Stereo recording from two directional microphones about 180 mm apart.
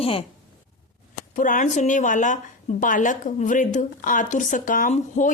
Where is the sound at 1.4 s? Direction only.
45° left (ahead or behind).